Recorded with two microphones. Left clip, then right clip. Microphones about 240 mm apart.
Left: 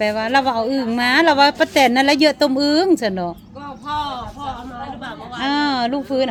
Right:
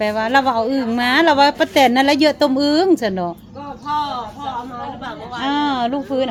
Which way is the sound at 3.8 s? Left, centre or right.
Left.